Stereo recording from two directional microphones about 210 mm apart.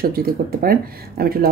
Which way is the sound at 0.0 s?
45° right (ahead or behind).